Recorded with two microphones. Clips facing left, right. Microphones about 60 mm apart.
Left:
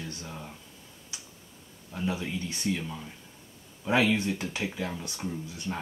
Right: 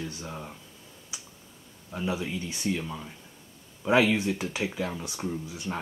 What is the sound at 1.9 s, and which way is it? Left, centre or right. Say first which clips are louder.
Speech: right 1 dB; centre.